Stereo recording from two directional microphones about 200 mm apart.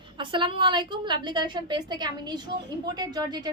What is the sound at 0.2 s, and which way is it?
A woman's voice, 25° right (ahead or behind).